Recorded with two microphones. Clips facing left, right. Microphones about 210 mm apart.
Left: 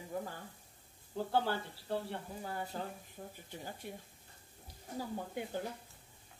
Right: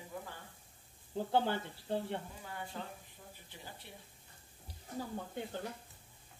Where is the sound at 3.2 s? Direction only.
50° left (ahead or behind).